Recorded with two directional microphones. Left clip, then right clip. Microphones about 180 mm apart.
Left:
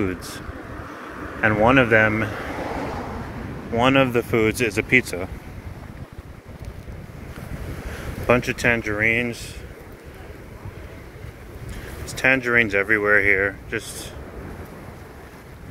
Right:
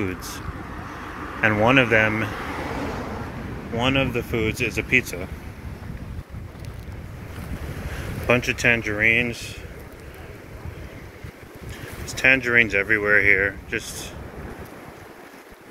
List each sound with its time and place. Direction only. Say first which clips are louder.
0.0 s speech: left 2 dB; 20° left (ahead or behind)
0.8 s vehicle: right 1 dB; 10° right (ahead or behind)
1.4 s speech: left 1 dB; 15° left (ahead or behind)
2.3 s a sound: left 1 dB; 45° right (ahead or behind)
3.7 s speech: left 5 dB; 40° left (ahead or behind)
8.3 s speech: even; 15° left (ahead or behind)
12.2 s speech: right 1 dB; 10° left (ahead or behind)